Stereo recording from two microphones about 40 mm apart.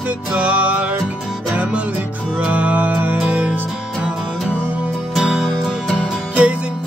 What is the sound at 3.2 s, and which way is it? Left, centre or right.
Music, right.